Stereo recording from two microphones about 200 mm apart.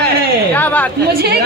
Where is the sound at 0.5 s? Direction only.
10° left (ahead or behind).